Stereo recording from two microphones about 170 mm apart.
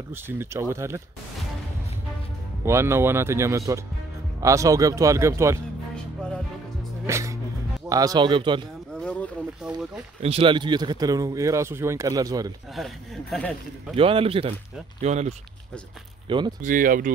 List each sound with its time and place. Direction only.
0.1 s speech: 15° right (ahead or behind)
2.6 s speech: 15° right (ahead or behind)
7.1 s speech: 15° right (ahead or behind)
9.6 s speech: 5° right (ahead or behind)
10.2 s speech: 35° right (ahead or behind)
12.7 s speech: centre (ahead or behind)
13.9 s a man's voice: 35° right (ahead or behind)
16.3 s speech: 25° right (ahead or behind)
16.6 s speech: 55° right (ahead or behind)